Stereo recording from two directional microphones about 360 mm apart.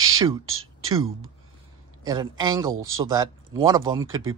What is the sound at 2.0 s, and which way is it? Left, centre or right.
Speech, centre.